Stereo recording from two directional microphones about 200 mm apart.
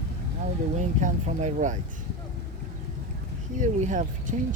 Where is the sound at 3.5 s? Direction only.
40° right (ahead or behind).